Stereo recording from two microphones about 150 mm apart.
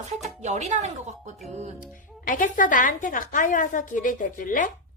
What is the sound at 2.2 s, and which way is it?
A woman's voice, 65° left (ahead or behind).